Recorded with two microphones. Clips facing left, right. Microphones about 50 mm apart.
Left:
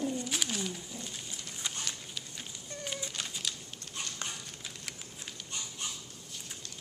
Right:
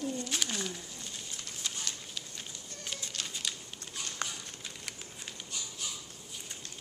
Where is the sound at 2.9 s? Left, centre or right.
Centre.